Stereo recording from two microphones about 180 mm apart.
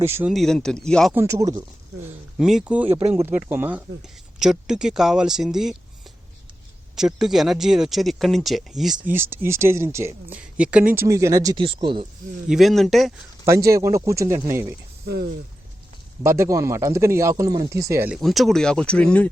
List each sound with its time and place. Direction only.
0.0 s speech: 10° right (ahead or behind)
0.3 s speech: centre (ahead or behind)
1.1 s speech: 15° right (ahead or behind)
2.4 s speech: 5° right (ahead or behind)
6.9 s speech: 5° right (ahead or behind)
9.1 s speech: 15° right (ahead or behind)
12.5 s speech: centre (ahead or behind)
13.4 s speech: 15° right (ahead or behind)
15.0 s speech: 60° right (ahead or behind)
16.2 s speech: 15° right (ahead or behind)
18.1 s speech: centre (ahead or behind)